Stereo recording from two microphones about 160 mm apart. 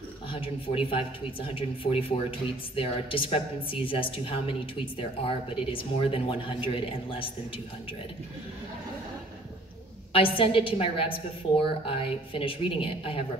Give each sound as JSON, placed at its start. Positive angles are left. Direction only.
{"t": 0.3, "sound": "a woman's voice", "side_deg": 35}
{"t": 10.1, "sound": "a woman's voice", "side_deg": 35}